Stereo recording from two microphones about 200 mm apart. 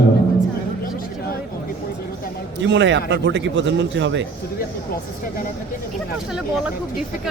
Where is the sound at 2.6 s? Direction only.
60° right (ahead or behind).